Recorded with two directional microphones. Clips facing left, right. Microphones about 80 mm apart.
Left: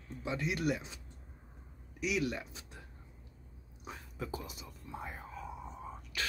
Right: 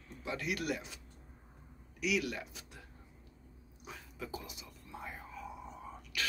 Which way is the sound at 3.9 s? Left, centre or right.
Left.